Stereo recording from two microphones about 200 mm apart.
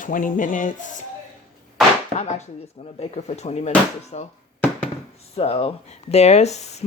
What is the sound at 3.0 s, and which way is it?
Speech, 30° left (ahead or behind).